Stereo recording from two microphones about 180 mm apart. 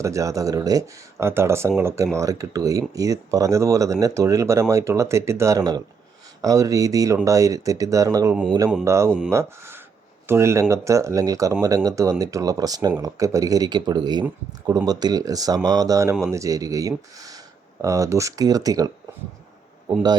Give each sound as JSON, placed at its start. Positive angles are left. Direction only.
{"t": 0.0, "sound": "speech", "side_deg": -15}